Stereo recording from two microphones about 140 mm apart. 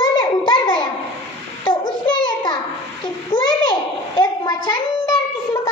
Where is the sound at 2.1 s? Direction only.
30° left (ahead or behind).